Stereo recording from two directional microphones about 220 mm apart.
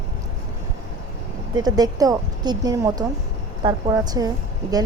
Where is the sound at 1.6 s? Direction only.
15° right (ahead or behind).